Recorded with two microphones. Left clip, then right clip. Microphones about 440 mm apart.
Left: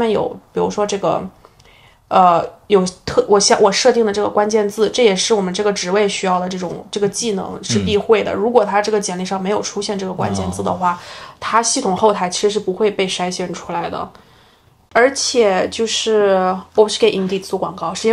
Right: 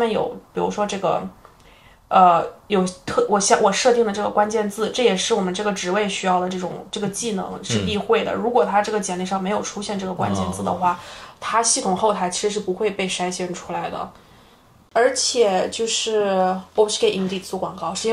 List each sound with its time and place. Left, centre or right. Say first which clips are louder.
0.0 s speech: left 4 dB; left